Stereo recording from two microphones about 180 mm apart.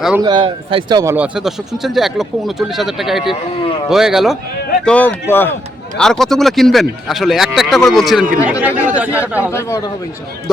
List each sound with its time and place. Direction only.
0.2 s speech: 25° right (ahead or behind)
1.1 s speech: 5° right (ahead or behind)
4.9 s speech: 10° left (ahead or behind); by 9.5 s 10° right (ahead or behind)
9.5 s speech: 15° left (ahead or behind)